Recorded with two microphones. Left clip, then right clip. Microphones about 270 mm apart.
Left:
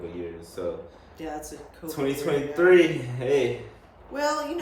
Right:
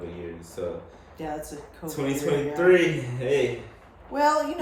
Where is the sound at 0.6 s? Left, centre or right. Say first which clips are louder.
Left 1 dB; centre.